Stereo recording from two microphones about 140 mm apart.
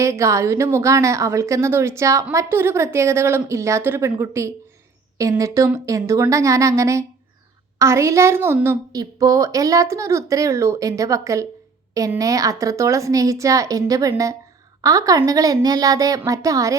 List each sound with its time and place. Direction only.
0.0 s a woman's voice: 20° right (ahead or behind)
8.9 s a woman's voice: 25° right (ahead or behind)